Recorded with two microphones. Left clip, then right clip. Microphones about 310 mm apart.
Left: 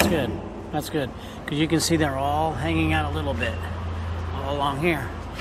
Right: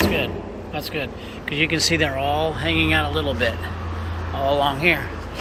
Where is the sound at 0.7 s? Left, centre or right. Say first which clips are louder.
Even; left.